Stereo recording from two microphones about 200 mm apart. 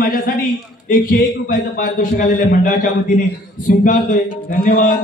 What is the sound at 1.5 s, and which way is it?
A man's voice, 40° left (ahead or behind).